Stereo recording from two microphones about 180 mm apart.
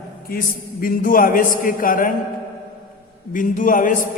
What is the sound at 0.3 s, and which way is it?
A man's voice, 50° left (ahead or behind).